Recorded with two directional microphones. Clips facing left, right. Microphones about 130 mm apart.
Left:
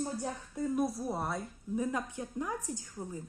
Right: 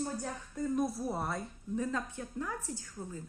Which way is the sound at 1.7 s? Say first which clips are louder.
Left 1 dB; 15° left (ahead or behind).